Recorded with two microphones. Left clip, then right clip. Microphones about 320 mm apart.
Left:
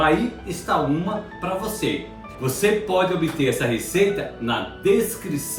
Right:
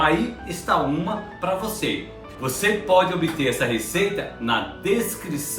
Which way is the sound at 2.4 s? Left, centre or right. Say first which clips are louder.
Left 2 dB; centre.